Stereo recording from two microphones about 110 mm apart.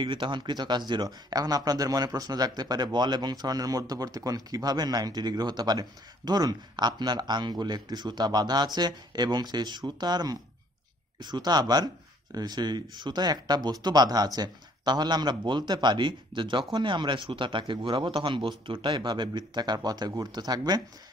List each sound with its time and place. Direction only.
0.0 s speech: 45° right (ahead or behind)